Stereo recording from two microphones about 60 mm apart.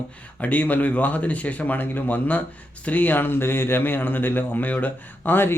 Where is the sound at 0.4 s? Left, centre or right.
Left.